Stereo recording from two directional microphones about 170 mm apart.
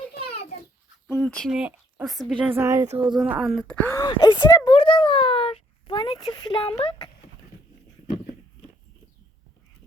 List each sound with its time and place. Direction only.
1.1 s speech: 5° left (ahead or behind)
2.6 s speech: 15° right (ahead or behind)
3.7 s speech: 10° left (ahead or behind)
3.9 s speech: 25° left (ahead or behind)